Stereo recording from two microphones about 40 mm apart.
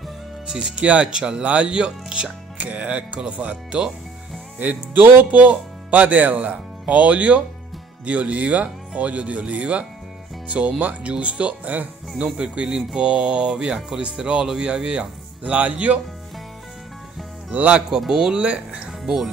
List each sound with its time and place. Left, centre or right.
0.5 s speech: right
2.6 s speech: right
4.6 s speech: right
12.2 s speech: right
17.5 s speech: right
17.8 s speech: centre
18.4 s speech: right